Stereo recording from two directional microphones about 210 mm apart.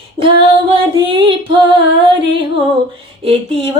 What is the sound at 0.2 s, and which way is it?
Female singing, 25° right (ahead or behind).